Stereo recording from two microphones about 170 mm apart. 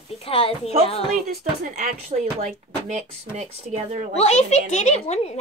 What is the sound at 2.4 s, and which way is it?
Speech, 45° right (ahead or behind).